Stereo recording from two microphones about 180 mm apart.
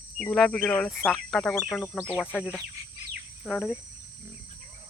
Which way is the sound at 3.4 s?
5° right (ahead or behind).